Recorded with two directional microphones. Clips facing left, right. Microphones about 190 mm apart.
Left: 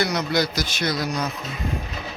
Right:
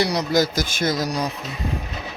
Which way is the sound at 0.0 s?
35° right (ahead or behind).